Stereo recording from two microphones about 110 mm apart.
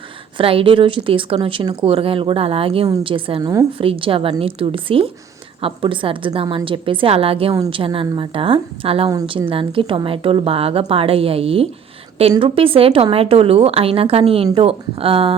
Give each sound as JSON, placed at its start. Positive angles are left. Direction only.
{"t": 0.3, "sound": "a woman's voice", "side_deg": -55}
{"t": 3.4, "sound": "a woman's voice", "side_deg": -30}
{"t": 3.8, "sound": "a woman's voice", "side_deg": -55}